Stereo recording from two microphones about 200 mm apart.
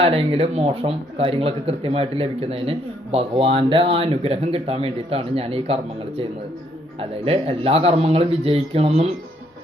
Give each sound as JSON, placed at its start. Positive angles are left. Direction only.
{"t": 0.0, "sound": "speech", "side_deg": -30}